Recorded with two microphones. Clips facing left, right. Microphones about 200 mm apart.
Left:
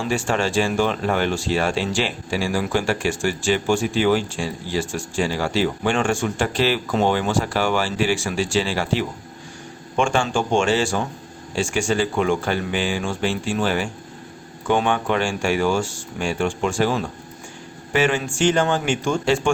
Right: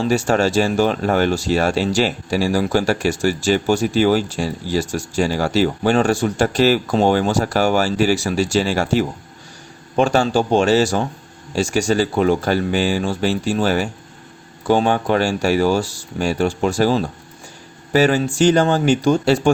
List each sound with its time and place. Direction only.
0.0 s speech: 40° right (ahead or behind)